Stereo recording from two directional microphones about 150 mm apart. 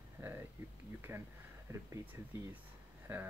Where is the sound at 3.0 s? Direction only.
15° right (ahead or behind).